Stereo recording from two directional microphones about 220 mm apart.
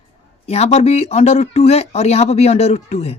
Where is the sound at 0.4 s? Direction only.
30° left (ahead or behind).